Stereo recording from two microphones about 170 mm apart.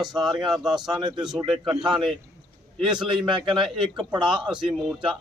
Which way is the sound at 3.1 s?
25° right (ahead or behind).